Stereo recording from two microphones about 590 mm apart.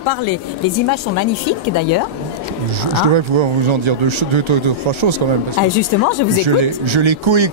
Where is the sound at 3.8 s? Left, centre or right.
Right.